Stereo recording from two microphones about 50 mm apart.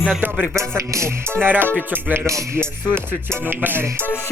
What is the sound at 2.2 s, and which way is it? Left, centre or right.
Music, right.